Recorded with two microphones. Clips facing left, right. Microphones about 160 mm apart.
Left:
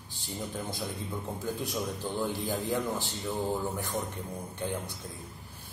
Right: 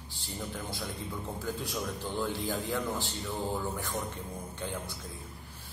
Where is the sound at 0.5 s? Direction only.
15° left (ahead or behind).